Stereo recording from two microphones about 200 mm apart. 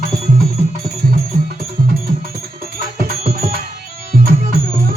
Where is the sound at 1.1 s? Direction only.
50° right (ahead or behind).